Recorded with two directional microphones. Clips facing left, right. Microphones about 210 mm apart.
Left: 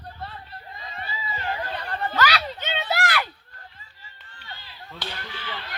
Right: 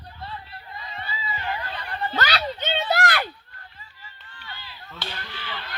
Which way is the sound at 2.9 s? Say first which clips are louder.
Right 1 dB; 40° right (ahead or behind).